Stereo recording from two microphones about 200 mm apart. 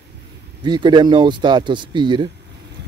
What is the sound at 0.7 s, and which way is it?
Speech, 25° right (ahead or behind).